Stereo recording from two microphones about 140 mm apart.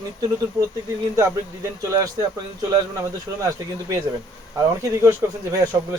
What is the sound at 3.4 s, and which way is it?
Speech, 25° right (ahead or behind).